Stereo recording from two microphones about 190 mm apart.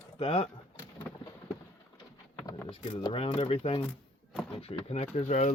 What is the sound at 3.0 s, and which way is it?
Speech, 25° left (ahead or behind).